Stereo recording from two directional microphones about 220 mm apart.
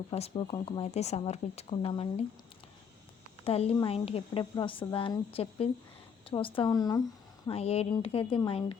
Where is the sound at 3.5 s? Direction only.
25° left (ahead or behind).